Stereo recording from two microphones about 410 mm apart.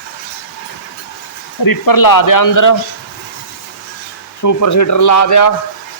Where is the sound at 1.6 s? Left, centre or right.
Left.